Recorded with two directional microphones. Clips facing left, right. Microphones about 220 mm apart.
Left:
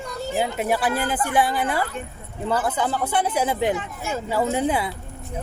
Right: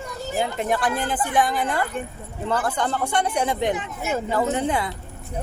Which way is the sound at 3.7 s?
20° right (ahead or behind).